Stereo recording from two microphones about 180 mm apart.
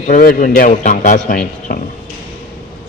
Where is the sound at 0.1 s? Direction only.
50° left (ahead or behind).